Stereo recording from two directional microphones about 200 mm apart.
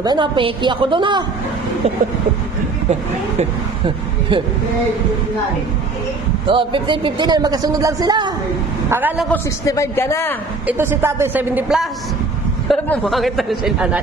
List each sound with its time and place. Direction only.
0.0 s speech: 20° right (ahead or behind)
2.9 s speech: 30° right (ahead or behind)
6.4 s speech: 25° right (ahead or behind)
8.9 s speech: 5° right (ahead or behind)
9.3 s speech: 15° left (ahead or behind)
10.7 s a woman's voice: 10° right (ahead or behind)
12.6 s speech: 5° left (ahead or behind)